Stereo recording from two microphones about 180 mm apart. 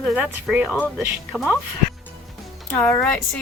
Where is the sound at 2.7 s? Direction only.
10° left (ahead or behind).